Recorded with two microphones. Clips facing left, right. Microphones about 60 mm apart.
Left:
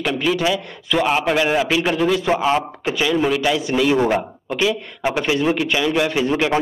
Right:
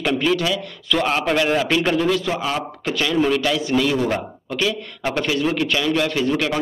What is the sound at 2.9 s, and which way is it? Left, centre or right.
A man's voice, centre.